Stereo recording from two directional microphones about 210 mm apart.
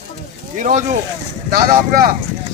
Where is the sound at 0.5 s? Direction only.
35° right (ahead or behind).